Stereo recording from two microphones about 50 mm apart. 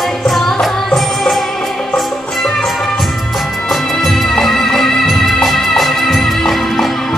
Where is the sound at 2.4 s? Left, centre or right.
Centre.